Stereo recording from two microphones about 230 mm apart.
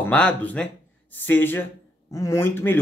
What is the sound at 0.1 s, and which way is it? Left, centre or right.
Speech, centre.